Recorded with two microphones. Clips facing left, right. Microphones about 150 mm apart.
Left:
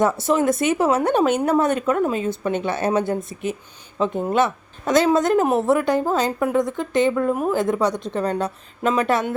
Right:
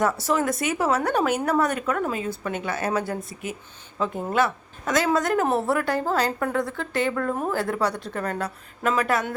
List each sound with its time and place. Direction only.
0.0 s a woman's voice: 20° left (ahead or behind)